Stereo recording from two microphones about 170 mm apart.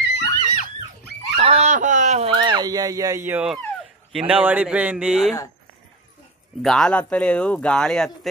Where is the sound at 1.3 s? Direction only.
40° right (ahead or behind).